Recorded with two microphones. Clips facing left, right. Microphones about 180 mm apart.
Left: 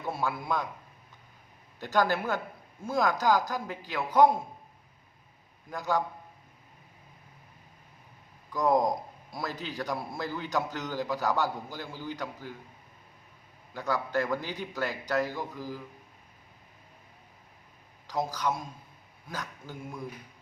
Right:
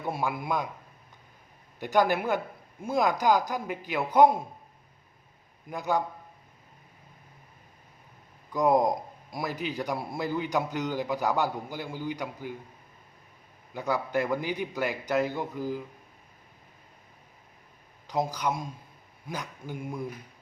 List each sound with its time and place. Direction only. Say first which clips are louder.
0.0 s a man's voice: right 2 dB; 15° right (ahead or behind)
1.8 s a man's voice: right 3 dB; 15° right (ahead or behind)
5.7 s a man's voice: right 1 dB; 20° right (ahead or behind)
8.5 s a man's voice: right 2 dB; 20° right (ahead or behind)
13.7 s a man's voice: right 2 dB; 15° right (ahead or behind)
18.1 s a man's voice: right 2 dB; 20° right (ahead or behind)